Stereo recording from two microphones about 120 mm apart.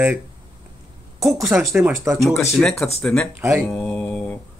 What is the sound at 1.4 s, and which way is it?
Speech, centre (ahead or behind).